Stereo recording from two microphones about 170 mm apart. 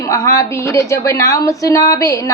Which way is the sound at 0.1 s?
20° left (ahead or behind).